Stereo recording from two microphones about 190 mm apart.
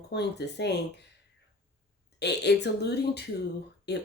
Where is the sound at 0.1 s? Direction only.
60° left (ahead or behind).